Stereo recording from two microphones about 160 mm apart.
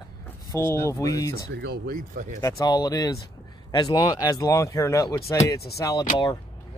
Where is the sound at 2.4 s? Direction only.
25° left (ahead or behind).